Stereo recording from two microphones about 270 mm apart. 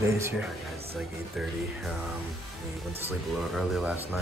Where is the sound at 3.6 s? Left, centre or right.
Centre.